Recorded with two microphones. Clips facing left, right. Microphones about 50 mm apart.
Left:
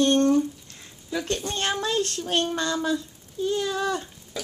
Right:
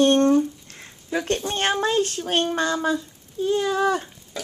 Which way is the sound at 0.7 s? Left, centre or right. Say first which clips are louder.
Right 4 dB; right.